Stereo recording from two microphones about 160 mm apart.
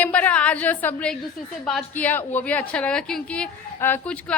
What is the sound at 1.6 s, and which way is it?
A woman's voice, 5° left (ahead or behind).